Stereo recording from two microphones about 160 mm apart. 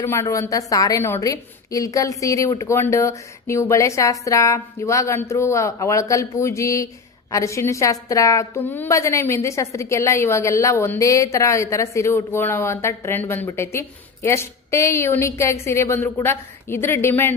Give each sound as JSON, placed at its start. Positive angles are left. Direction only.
{"t": 0.0, "sound": "a woman's voice", "side_deg": 15}